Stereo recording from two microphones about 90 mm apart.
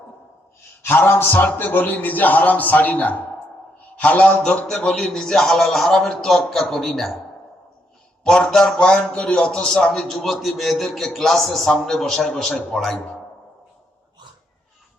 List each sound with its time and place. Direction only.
0.8 s a man's voice: 25° left (ahead or behind); by 7.1 s centre (ahead or behind)
8.2 s a man's voice: 10° left (ahead or behind)